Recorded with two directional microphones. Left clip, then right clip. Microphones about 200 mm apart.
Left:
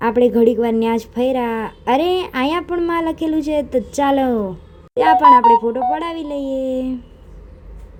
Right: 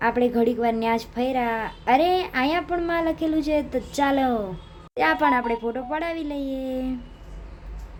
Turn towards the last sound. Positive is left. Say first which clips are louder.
# left 8 dB
turn(degrees=15)  # may be behind; listen again after turning